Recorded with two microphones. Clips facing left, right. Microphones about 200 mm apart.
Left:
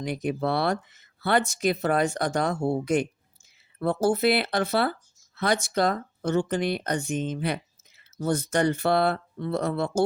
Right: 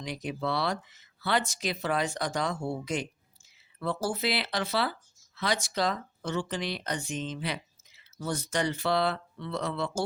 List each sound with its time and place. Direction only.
0.0 s speech: 55° left (ahead or behind)